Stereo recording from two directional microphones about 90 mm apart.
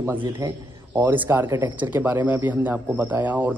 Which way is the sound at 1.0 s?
25° right (ahead or behind).